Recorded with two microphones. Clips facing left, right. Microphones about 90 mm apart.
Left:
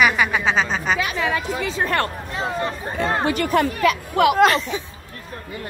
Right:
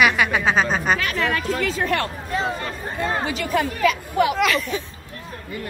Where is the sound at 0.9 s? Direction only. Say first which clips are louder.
Even; 10° left (ahead or behind).